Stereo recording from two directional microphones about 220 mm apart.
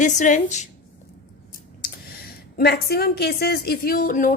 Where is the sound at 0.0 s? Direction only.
35° left (ahead or behind).